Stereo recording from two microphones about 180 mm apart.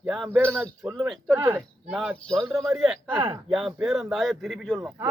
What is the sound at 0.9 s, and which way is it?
A man's voice, centre (ahead or behind).